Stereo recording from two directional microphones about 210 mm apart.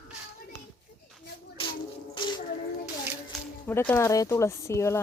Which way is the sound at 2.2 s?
20° left (ahead or behind).